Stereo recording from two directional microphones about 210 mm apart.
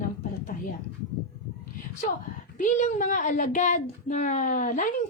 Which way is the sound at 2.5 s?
35° left (ahead or behind).